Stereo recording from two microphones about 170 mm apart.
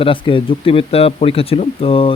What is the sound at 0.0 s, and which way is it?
Speech, 30° left (ahead or behind).